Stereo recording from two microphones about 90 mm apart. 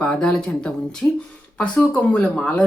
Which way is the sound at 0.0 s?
10° left (ahead or behind).